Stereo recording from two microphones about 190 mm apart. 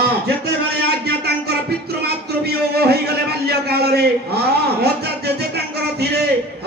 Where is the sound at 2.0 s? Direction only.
55° right (ahead or behind).